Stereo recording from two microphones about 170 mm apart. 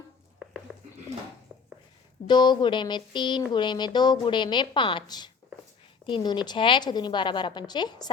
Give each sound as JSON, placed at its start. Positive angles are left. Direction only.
{"t": 2.2, "sound": "speech", "side_deg": 25}